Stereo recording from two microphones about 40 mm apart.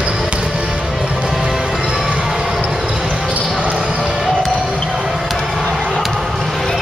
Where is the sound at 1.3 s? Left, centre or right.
Centre.